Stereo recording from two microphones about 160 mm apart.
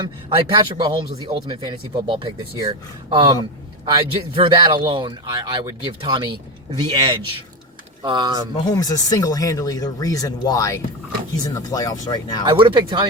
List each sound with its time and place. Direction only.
0.0 s a man's voice: 30° right (ahead or behind)
8.7 s speech: 25° left (ahead or behind)
12.5 s speech: 30° right (ahead or behind)